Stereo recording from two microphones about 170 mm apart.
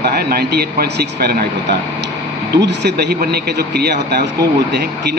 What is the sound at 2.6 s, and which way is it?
A man's voice, 75° right (ahead or behind).